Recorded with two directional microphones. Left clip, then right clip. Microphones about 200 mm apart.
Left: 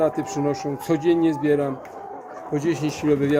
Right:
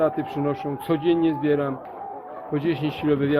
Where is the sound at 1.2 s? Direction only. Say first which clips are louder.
Left 1 dB; 45° right (ahead or behind).